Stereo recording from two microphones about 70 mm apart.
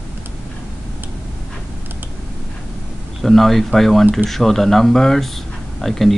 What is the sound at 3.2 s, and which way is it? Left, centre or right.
Speech, centre.